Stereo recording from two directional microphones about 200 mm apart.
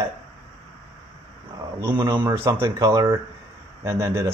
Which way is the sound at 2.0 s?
20° right (ahead or behind).